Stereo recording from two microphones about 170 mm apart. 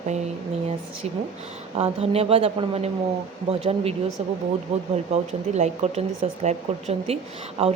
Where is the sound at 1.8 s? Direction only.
35° right (ahead or behind).